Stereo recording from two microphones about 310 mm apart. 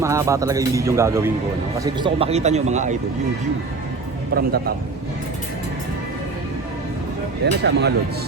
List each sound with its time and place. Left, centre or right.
0.0 s a man's voice: centre
7.4 s speech: right